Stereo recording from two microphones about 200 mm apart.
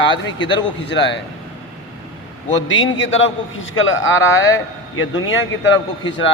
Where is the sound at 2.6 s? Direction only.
70° left (ahead or behind).